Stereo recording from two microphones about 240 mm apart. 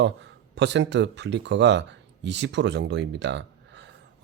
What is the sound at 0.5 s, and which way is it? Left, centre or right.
Speech, right.